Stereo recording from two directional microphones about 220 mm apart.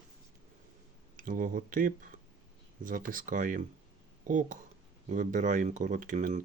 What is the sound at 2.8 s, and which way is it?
Speech, 40° right (ahead or behind).